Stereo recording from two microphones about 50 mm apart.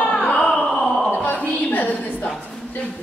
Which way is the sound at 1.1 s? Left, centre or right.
Left.